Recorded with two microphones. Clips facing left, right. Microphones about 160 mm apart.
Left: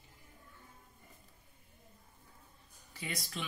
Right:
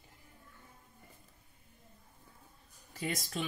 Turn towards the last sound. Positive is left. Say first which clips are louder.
# right 5 dB
turn(degrees=-45)  # may be behind; listen again after turning